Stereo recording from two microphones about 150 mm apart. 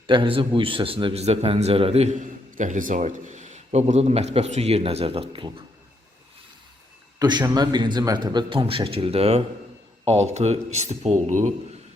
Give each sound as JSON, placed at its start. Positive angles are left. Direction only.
{"t": 0.1, "sound": "a man's voice", "side_deg": -35}
{"t": 7.2, "sound": "a man's voice", "side_deg": -30}